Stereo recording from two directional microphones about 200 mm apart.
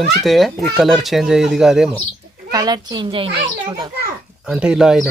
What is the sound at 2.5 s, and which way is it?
A child's voice, 20° right (ahead or behind).